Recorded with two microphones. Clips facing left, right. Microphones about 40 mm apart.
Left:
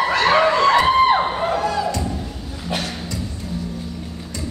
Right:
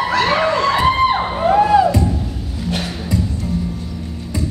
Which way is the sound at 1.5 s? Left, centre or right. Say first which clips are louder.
Right 9 dB; centre.